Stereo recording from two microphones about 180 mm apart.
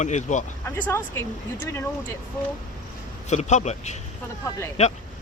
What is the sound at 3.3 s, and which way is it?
Speech, 40° left (ahead or behind).